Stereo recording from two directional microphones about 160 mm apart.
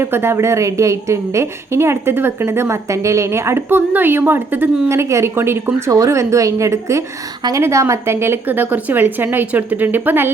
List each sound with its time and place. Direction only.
0.0 s a woman's voice: 15° right (ahead or behind)